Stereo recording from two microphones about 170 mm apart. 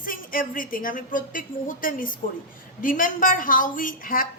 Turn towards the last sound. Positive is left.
turn(degrees=55)  # may be behind; listen again after turning